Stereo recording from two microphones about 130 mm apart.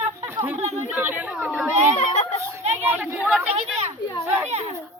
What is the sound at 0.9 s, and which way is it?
Speech, 15° right (ahead or behind).